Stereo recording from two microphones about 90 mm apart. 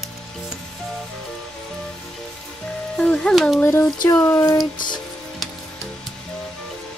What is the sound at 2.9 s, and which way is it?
Music, 10° left (ahead or behind).